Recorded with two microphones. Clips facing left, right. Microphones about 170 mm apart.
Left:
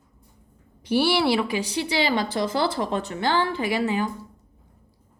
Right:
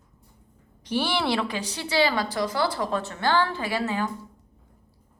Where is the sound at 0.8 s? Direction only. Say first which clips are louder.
Left 5 dB; 10° left (ahead or behind).